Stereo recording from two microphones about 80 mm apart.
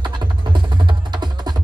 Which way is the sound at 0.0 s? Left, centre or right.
Right.